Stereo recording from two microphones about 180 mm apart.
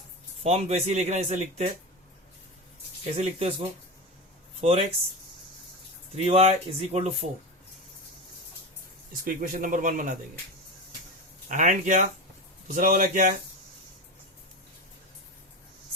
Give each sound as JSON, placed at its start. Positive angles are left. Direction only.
{"t": 0.4, "sound": "speech", "side_deg": -35}
{"t": 3.2, "sound": "speech", "side_deg": -35}
{"t": 6.1, "sound": "speech", "side_deg": -35}
{"t": 9.2, "sound": "speech", "side_deg": -45}
{"t": 11.4, "sound": "speech", "side_deg": -45}